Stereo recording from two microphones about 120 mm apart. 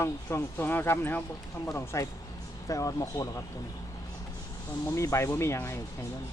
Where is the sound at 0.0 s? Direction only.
20° left (ahead or behind).